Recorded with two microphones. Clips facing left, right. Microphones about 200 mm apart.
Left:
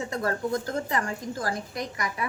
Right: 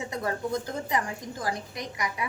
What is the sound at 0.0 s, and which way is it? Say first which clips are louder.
A woman's voice: left 2 dB; 15° right (ahead or behind).